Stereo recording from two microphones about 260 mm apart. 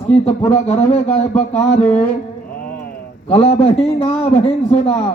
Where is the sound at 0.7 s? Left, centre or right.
Left.